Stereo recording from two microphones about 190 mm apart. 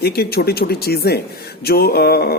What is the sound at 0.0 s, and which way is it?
Speech, 55° left (ahead or behind).